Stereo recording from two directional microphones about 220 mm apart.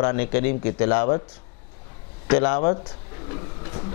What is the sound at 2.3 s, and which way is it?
Speech, 10° left (ahead or behind).